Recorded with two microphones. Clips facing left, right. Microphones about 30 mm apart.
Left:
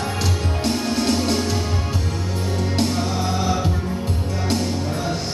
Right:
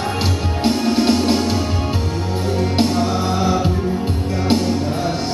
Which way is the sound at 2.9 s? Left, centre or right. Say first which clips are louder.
Right 4 dB; centre.